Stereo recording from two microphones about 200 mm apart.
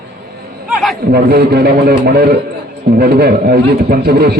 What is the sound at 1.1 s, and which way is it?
A man's voice, 50° right (ahead or behind).